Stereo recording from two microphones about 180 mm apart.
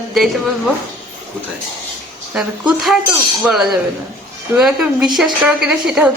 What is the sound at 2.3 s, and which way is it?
A woman's voice, centre (ahead or behind).